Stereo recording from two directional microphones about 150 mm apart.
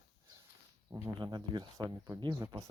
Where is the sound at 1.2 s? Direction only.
30° right (ahead or behind).